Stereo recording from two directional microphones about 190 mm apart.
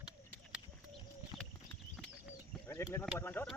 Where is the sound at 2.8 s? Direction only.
15° left (ahead or behind).